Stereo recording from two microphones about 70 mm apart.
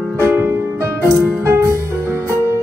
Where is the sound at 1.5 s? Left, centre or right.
Right.